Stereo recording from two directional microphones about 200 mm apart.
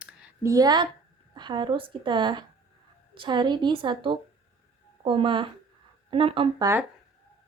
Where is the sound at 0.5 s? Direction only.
20° right (ahead or behind).